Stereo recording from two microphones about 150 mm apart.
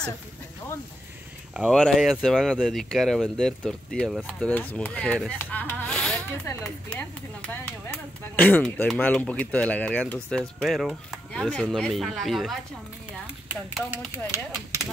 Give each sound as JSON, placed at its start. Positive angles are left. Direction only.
{"t": 1.5, "sound": "speech", "side_deg": -5}
{"t": 5.4, "sound": "rub", "side_deg": 10}
{"t": 6.4, "sound": "speech", "side_deg": 10}
{"t": 14.1, "sound": "speech", "side_deg": -15}